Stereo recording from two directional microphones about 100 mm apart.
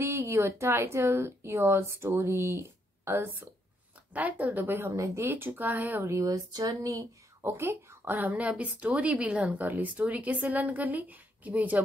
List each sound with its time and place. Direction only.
0.0 s a woman's voice: 25° right (ahead or behind)
7.4 s a woman's voice: 25° right (ahead or behind)